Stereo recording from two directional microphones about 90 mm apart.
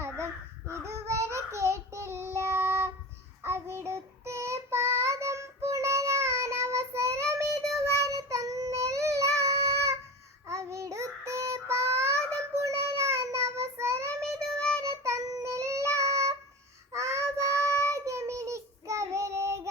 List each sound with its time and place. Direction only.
0.7 s child singing: 30° right (ahead or behind)